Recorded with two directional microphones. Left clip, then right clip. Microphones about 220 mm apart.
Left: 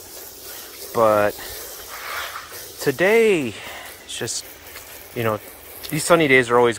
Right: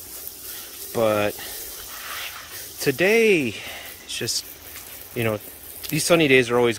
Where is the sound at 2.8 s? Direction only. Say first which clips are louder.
Left 2 dB; 15° right (ahead or behind).